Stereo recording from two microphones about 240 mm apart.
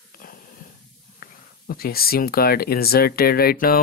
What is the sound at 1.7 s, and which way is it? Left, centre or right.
Speech, left.